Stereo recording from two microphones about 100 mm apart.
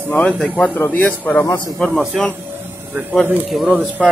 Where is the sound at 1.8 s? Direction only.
5° left (ahead or behind).